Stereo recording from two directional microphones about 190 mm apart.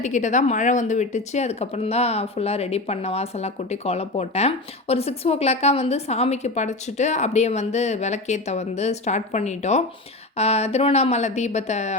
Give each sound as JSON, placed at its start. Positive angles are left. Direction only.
{"t": 0.0, "sound": "speech", "side_deg": 40}